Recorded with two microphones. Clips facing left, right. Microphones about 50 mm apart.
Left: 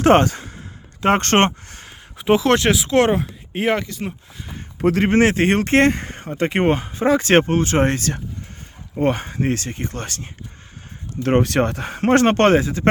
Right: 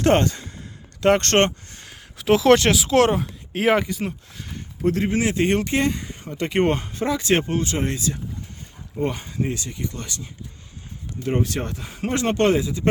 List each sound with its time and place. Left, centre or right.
0.0 s a sound: left
1.0 s speech: left
1.9 s a sound: centre
2.4 s speech: centre
3.8 s speech: centre
4.0 s speech: centre
4.9 s speech: left
5.3 s speech: left
6.2 s speech: left
6.6 s speech: left
7.2 s speech: left
9.0 s speech: left
11.2 s speech: left